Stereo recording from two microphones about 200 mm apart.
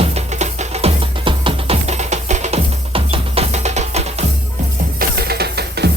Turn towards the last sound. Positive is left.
turn(degrees=-55)  # may be behind; listen again after turning